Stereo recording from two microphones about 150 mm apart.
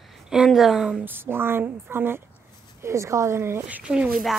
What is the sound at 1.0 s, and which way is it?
A woman's voice, 15° right (ahead or behind).